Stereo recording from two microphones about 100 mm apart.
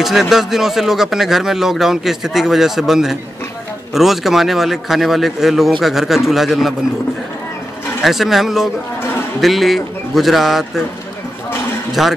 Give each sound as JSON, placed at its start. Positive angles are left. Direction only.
{"t": 0.0, "sound": "speech", "side_deg": 0}
{"t": 8.0, "sound": "speech", "side_deg": 0}
{"t": 12.0, "sound": "speech", "side_deg": 0}